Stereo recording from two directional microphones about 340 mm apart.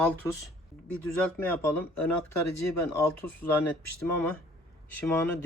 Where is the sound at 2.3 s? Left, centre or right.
Left.